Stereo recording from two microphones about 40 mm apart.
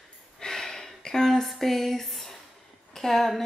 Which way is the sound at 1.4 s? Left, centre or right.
Centre.